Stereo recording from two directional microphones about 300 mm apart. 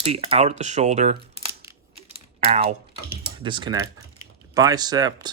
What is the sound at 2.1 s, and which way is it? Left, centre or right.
Typing, right.